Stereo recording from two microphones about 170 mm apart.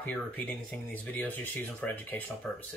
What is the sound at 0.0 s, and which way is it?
Speech, 10° left (ahead or behind).